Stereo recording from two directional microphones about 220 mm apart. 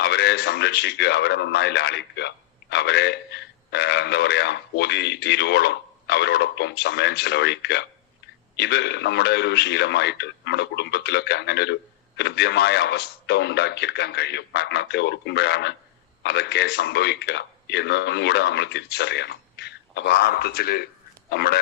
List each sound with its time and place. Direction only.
0.0 s speech: 50° left (ahead or behind)